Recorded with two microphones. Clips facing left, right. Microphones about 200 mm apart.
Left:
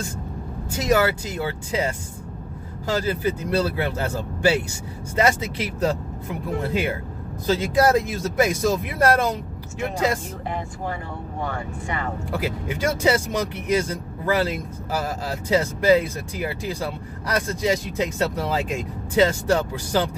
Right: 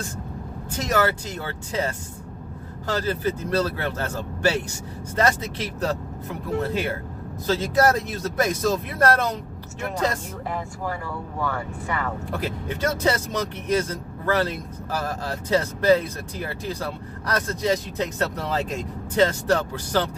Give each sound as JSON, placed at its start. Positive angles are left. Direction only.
{"t": 0.7, "sound": "speech", "side_deg": 10}
{"t": 11.4, "sound": "speech", "side_deg": 20}
{"t": 12.3, "sound": "speech", "side_deg": 10}